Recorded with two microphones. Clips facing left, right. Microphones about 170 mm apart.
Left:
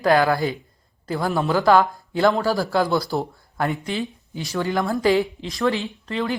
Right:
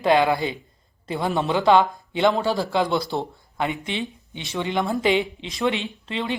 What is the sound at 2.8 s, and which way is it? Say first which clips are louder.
Speech: left 2 dB; 20° right (ahead or behind).